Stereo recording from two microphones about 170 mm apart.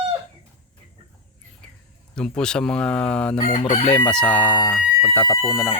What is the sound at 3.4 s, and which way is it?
Chicken, 45° left (ahead or behind).